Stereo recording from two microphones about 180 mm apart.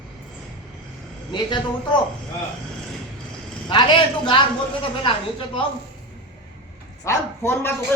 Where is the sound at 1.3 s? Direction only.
25° left (ahead or behind).